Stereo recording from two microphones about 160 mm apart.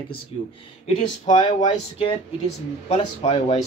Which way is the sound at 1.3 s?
45° left (ahead or behind).